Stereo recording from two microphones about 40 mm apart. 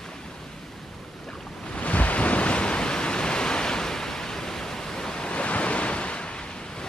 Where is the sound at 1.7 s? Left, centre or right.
Left.